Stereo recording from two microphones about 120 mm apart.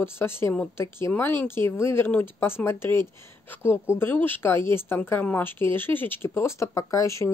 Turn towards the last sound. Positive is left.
turn(degrees=25)  # may be behind; listen again after turning